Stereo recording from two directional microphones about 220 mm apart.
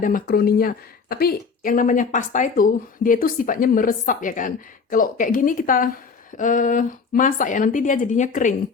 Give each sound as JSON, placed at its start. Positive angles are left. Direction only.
{"t": 0.0, "sound": "speech", "side_deg": 40}